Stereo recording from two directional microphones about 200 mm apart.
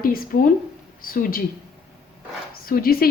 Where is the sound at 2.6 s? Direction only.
50° left (ahead or behind).